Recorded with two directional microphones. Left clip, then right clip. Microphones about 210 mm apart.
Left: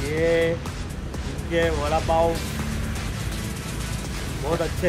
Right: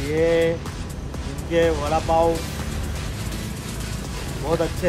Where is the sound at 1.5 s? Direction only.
20° right (ahead or behind).